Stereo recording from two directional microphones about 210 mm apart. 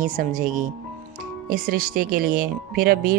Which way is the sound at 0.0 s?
40° right (ahead or behind).